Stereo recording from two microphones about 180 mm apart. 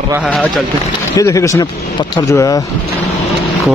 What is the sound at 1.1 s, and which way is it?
A man's voice, 15° left (ahead or behind).